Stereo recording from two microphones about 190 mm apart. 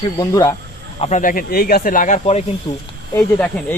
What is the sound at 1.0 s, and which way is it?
Speech, 40° left (ahead or behind).